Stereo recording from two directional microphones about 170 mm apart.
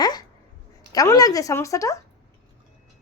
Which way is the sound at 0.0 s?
25° left (ahead or behind).